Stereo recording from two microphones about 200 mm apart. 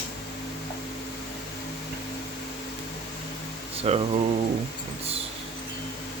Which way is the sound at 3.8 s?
30° right (ahead or behind).